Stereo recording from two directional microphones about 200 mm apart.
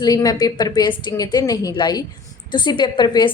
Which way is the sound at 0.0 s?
20° left (ahead or behind).